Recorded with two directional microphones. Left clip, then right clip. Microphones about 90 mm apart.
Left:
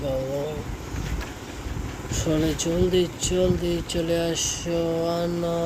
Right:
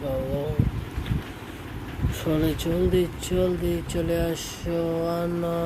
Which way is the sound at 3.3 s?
5° left (ahead or behind).